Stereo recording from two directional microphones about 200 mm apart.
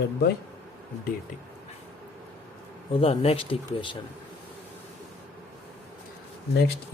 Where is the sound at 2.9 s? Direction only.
30° left (ahead or behind).